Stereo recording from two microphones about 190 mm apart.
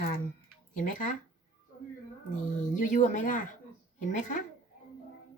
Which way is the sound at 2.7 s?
40° left (ahead or behind).